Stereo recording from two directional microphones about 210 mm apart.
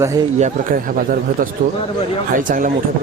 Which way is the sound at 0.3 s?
40° right (ahead or behind).